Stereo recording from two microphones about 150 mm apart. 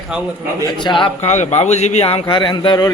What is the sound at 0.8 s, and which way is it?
Speech, 30° left (ahead or behind).